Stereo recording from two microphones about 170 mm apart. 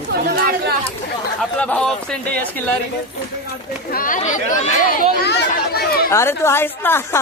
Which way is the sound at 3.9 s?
50° left (ahead or behind).